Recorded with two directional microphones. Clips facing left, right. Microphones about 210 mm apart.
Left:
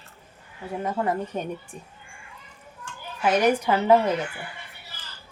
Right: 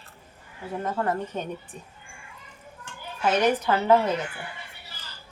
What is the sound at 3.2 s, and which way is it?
Speech, 10° left (ahead or behind).